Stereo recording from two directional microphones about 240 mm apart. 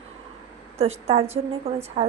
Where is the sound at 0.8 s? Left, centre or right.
Right.